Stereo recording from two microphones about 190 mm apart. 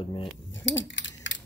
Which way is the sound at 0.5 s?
75° left (ahead or behind).